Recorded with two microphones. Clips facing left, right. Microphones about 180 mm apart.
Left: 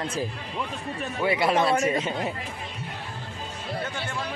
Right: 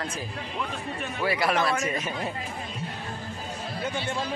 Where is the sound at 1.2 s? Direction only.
25° left (ahead or behind).